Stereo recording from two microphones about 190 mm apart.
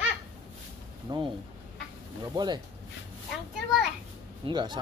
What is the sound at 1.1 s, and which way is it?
Speech, 20° right (ahead or behind).